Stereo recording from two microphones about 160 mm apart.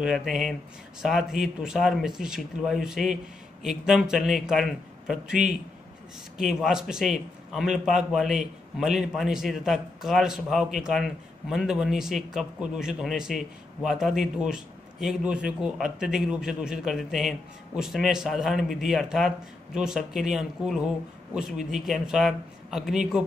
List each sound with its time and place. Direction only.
0.0 s a man's voice: centre (ahead or behind)